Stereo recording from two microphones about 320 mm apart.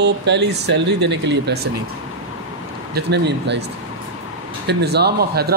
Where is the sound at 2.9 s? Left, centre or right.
Right.